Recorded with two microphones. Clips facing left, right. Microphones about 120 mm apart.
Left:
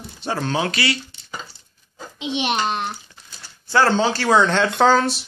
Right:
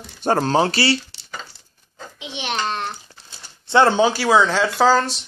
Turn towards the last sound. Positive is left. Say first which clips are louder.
# even
turn(degrees=0)  # may be behind; listen again after turning